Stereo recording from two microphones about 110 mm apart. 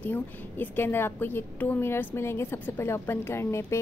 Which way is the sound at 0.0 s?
15° left (ahead or behind).